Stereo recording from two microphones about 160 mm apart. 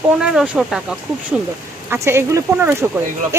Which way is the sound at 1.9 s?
15° right (ahead or behind).